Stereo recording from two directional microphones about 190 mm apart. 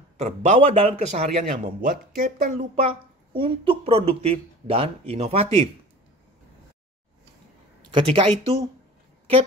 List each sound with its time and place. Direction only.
0.2 s a woman's voice: 35° right (ahead or behind)
2.7 s a woman's voice: 30° right (ahead or behind)
7.9 s speech: 25° right (ahead or behind)